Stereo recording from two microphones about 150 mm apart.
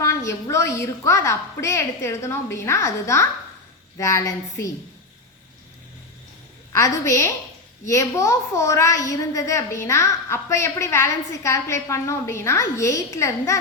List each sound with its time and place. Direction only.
0.0 s a woman's voice: 20° left (ahead or behind)
6.7 s a woman's voice: 20° left (ahead or behind)